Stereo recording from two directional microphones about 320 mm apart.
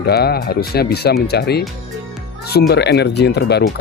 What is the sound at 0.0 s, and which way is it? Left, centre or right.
Speech, left.